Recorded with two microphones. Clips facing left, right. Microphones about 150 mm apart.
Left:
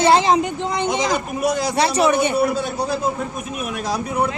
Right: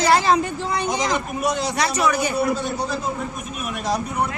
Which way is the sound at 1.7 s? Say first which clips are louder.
Left 4 dB; 30° left (ahead or behind).